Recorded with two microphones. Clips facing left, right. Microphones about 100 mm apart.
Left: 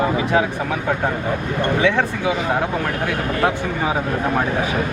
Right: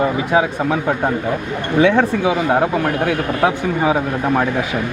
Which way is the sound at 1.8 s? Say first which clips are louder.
Right 7 dB; 20° right (ahead or behind).